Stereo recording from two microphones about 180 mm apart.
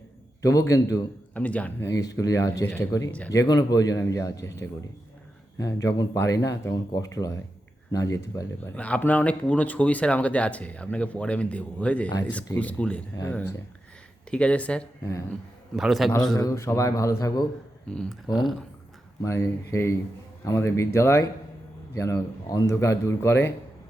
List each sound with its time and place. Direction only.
0.7 s speech: 15° left (ahead or behind)
1.9 s speech: 20° left (ahead or behind)
3.4 s speech: 20° left (ahead or behind)
5.5 s speech: 20° left (ahead or behind); by 16.1 s centre (ahead or behind)
16.3 s speech: 20° left (ahead or behind)
17.8 s speech: 5° left (ahead or behind)
19.2 s speech: 15° left (ahead or behind)